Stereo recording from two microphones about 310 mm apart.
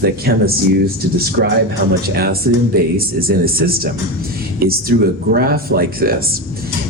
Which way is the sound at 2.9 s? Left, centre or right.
Right.